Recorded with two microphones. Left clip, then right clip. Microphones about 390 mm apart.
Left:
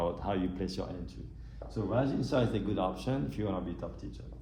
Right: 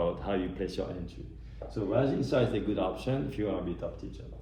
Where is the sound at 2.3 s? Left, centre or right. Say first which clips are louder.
Right 2 dB; centre.